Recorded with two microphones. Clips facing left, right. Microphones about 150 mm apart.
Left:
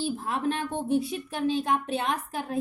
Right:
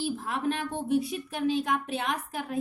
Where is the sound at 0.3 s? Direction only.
30° left (ahead or behind).